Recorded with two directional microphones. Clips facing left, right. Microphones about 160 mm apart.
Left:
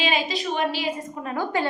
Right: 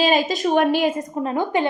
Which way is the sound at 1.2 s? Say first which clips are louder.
Right 4 dB; 20° right (ahead or behind).